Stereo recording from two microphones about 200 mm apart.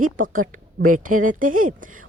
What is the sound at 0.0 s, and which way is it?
A woman's voice, 40° right (ahead or behind).